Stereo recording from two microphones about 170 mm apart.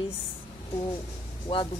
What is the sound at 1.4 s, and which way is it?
Speech, 30° left (ahead or behind).